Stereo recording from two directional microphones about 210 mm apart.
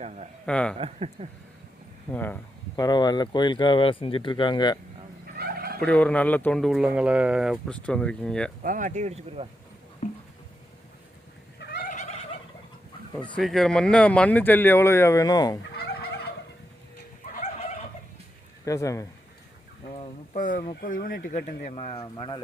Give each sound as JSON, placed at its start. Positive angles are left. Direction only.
{"t": 0.4, "sound": "speech", "side_deg": 5}
{"t": 0.8, "sound": "speech", "side_deg": -25}
{"t": 2.1, "sound": "speech", "side_deg": 10}
{"t": 5.4, "sound": "turkey", "side_deg": -45}
{"t": 5.8, "sound": "speech", "side_deg": 5}
{"t": 8.6, "sound": "speech", "side_deg": -40}
{"t": 10.0, "sound": "a sound", "side_deg": 35}
{"t": 11.6, "sound": "gobble", "side_deg": 45}
{"t": 13.3, "sound": "speech", "side_deg": 0}
{"t": 15.7, "sound": "turkey", "side_deg": 50}
{"t": 18.6, "sound": "speech", "side_deg": 15}
{"t": 19.9, "sound": "speech", "side_deg": 35}